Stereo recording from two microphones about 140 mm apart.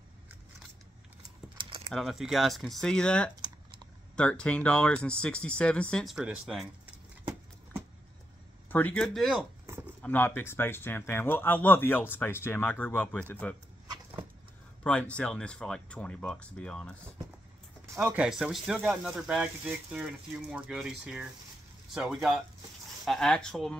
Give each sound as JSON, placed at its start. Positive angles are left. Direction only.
{"t": 1.6, "sound": "typing", "side_deg": -35}
{"t": 2.0, "sound": "speech", "side_deg": 0}
{"t": 3.3, "sound": "typing", "side_deg": -30}
{"t": 4.2, "sound": "speech", "side_deg": 5}
{"t": 8.6, "sound": "speech", "side_deg": 10}
{"t": 10.0, "sound": "speech", "side_deg": 15}
{"t": 14.8, "sound": "speech", "side_deg": 10}
{"t": 17.9, "sound": "speech", "side_deg": -10}